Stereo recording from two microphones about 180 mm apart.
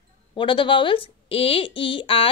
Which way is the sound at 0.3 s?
25° left (ahead or behind).